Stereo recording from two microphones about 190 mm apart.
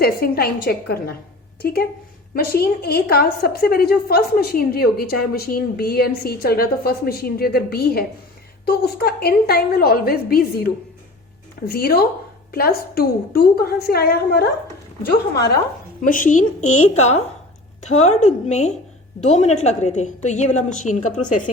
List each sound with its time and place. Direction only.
0.0 s a woman's voice: 55° left (ahead or behind)
11.7 s a woman's voice: 55° left (ahead or behind)
16.0 s a woman's voice: 45° left (ahead or behind)